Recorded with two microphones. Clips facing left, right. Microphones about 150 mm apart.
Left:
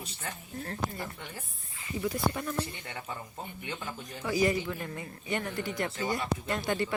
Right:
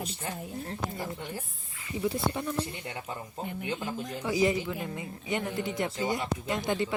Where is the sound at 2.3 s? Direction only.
15° right (ahead or behind).